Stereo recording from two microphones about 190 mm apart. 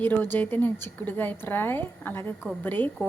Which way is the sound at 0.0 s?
10° left (ahead or behind).